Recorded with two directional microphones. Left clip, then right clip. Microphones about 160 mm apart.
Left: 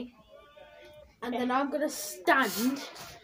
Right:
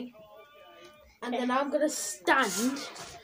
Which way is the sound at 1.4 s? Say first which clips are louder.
Right 1 dB; 5° right (ahead or behind).